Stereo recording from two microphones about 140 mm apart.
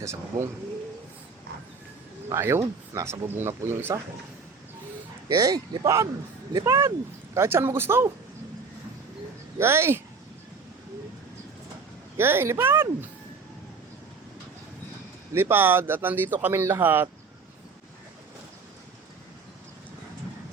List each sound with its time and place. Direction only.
0.0 s speech: 20° right (ahead or behind)
2.3 s speech: 20° right (ahead or behind)
5.3 s speech: 25° right (ahead or behind)
9.6 s speech: 20° right (ahead or behind)
12.1 s speech: 15° right (ahead or behind)
15.3 s speech: 15° right (ahead or behind)